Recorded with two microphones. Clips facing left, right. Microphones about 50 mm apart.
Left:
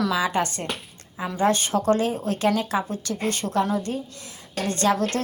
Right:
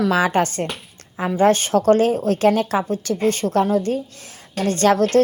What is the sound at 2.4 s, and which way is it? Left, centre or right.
Speech, right.